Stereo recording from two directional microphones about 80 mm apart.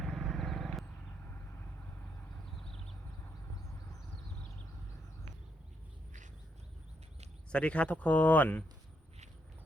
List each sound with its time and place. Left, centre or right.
0.0 s vehicle: centre
7.5 s speech: centre